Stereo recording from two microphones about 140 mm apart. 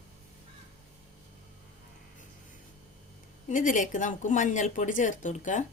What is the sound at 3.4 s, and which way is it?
Speech, 70° left (ahead or behind).